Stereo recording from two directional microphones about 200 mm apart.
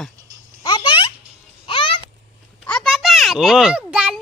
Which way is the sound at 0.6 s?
20° left (ahead or behind).